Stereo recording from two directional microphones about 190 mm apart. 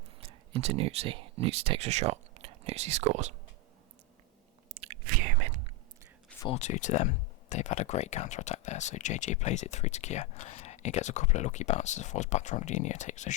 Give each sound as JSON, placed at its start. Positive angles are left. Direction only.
{"t": 0.2, "sound": "speech", "side_deg": -30}
{"t": 4.7, "sound": "biting", "side_deg": -35}
{"t": 5.0, "sound": "whispering", "side_deg": -45}
{"t": 6.5, "sound": "speech", "side_deg": 35}